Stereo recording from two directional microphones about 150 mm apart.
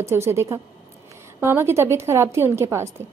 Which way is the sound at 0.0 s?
15° right (ahead or behind).